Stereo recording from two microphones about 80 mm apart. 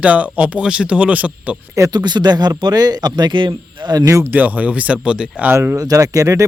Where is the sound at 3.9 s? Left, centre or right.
Right.